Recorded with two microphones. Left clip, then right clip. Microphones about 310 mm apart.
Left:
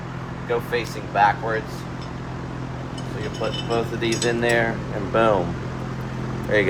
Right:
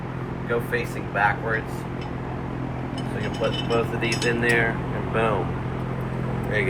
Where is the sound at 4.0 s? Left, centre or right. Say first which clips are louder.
Left 1 dB; left.